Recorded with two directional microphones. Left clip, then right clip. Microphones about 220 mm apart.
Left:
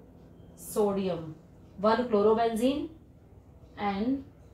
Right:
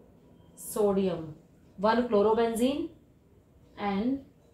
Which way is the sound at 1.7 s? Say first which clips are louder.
Even; 40° right (ahead or behind).